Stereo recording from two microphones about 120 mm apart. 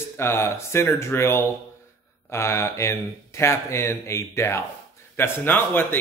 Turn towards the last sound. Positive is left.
turn(degrees=15)  # may be behind; listen again after turning